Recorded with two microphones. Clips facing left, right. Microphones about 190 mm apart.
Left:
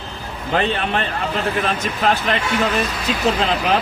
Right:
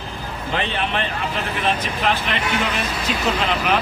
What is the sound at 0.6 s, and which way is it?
Speech, 45° left (ahead or behind).